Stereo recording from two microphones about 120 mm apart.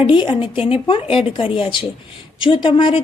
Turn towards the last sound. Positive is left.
turn(degrees=45)  # may be behind; listen again after turning